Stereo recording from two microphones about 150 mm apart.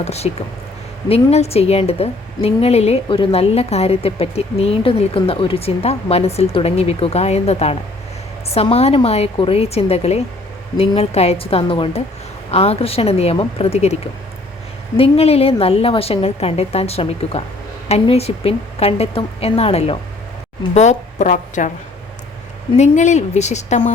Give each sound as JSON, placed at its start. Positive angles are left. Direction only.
{"t": 0.0, "sound": "a woman's voice", "side_deg": 45}
{"t": 20.7, "sound": "a woman's voice", "side_deg": 50}
{"t": 22.8, "sound": "a woman's voice", "side_deg": 50}